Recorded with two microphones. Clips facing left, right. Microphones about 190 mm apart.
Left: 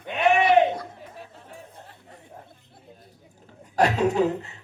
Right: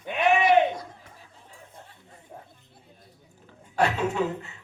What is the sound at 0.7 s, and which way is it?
Chatter, 70° left (ahead or behind).